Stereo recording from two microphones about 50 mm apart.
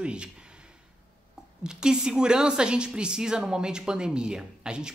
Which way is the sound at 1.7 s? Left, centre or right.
Centre.